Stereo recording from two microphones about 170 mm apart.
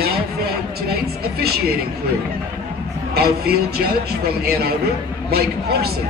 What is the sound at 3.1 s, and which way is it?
Speech, 65° right (ahead or behind).